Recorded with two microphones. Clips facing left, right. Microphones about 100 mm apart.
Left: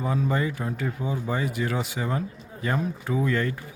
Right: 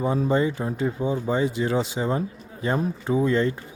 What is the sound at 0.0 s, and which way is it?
Speech, 25° right (ahead or behind).